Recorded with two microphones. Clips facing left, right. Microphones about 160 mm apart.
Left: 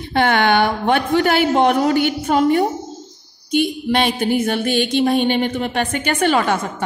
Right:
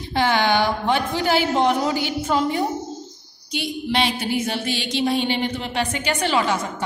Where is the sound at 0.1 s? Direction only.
60° left (ahead or behind).